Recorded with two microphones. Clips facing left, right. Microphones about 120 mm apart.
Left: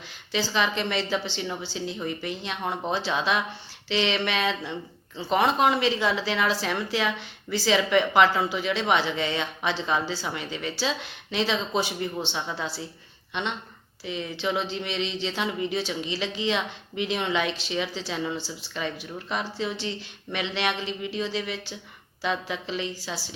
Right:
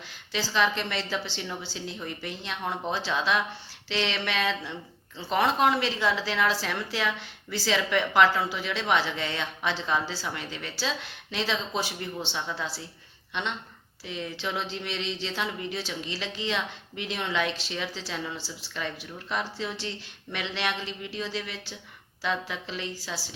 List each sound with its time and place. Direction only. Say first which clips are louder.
0.4 s a woman's voice: right 1 dB; 15° left (ahead or behind)